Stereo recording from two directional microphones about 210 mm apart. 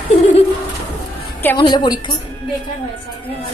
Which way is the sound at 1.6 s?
20° left (ahead or behind).